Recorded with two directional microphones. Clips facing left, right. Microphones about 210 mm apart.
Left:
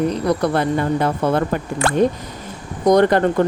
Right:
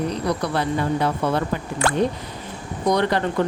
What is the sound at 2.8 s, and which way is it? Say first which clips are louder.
Speech: left 7 dB; 45° left (ahead or behind).